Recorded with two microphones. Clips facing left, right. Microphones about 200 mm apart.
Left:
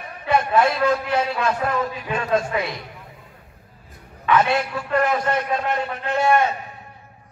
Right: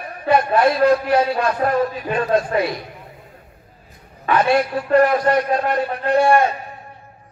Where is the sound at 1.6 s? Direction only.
45° right (ahead or behind).